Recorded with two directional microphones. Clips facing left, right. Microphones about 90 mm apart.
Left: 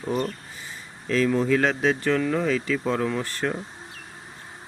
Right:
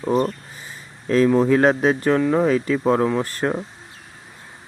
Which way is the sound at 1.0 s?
35° right (ahead or behind).